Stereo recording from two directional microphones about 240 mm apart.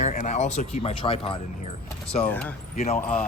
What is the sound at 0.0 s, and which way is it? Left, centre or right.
Speech, left.